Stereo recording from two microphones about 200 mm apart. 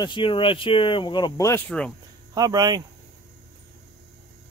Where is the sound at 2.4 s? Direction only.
20° right (ahead or behind).